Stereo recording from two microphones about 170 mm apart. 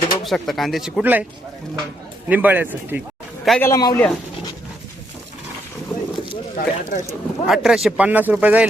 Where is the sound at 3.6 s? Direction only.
20° left (ahead or behind).